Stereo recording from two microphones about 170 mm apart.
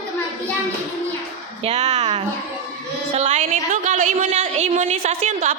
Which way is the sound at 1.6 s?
40° right (ahead or behind).